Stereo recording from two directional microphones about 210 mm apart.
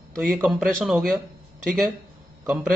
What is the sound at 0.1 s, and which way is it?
Speech, centre (ahead or behind).